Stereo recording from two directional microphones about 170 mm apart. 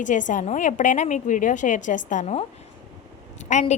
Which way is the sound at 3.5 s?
40° left (ahead or behind).